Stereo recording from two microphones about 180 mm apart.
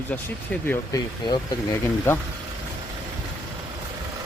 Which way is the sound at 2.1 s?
15° left (ahead or behind).